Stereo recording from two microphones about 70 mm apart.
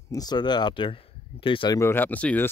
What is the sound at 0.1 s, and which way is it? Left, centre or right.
Speech, left.